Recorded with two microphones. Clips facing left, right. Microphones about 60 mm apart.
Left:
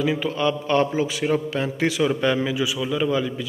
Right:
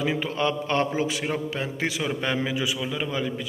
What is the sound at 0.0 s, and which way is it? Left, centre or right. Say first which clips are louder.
A man's voice: left 3 dB; right.